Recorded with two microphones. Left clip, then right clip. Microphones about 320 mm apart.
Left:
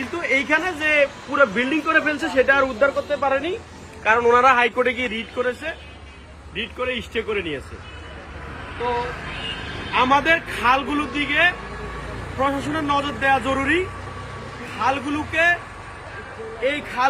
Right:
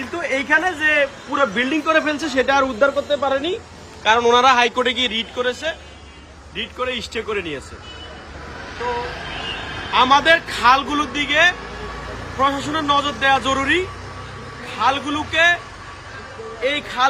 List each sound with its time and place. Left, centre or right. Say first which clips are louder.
0.2 s a man's voice: right 2 dB; centre
9.9 s speech: right 4 dB; centre
16.6 s speech: right 2 dB; centre